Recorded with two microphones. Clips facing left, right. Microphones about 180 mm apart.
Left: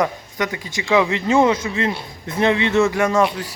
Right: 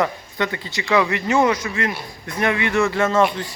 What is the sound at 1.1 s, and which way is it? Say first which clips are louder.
A man's voice: left 2 dB; 20° left (ahead or behind).